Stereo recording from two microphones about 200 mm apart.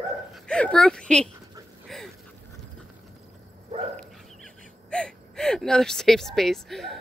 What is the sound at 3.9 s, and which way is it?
Gasp, 5° left (ahead or behind).